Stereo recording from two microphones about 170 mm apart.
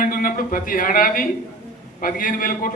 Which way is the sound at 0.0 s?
55° left (ahead or behind).